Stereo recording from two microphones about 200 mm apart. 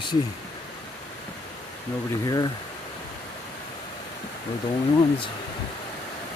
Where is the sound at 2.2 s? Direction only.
20° left (ahead or behind).